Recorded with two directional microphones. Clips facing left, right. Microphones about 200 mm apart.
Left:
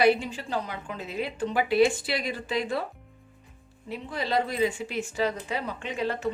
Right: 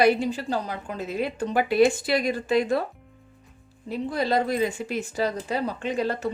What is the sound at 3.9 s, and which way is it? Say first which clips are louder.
A woman's voice: right 5 dB; 40° right (ahead or behind).